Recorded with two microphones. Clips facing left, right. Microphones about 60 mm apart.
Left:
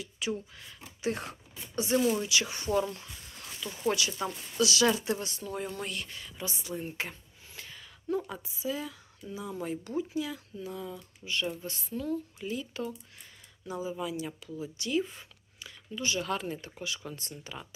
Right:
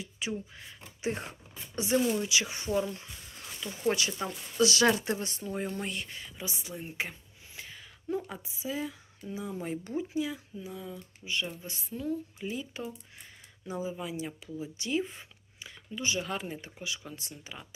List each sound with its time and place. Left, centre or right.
0.0 s speech: right
3.6 s speech: right
5.2 s speech: right; by 6.7 s centre
6.7 s a sound: centre
8.3 s speech: centre
10.7 s speech: centre